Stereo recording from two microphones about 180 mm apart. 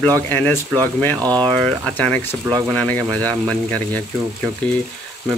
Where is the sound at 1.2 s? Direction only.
20° right (ahead or behind).